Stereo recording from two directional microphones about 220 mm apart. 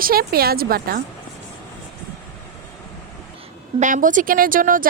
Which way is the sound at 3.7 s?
35° right (ahead or behind).